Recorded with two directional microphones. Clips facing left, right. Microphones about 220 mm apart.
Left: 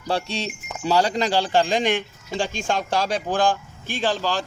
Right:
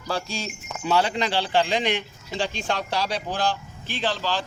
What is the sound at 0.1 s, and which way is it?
Speech, 35° left (ahead or behind).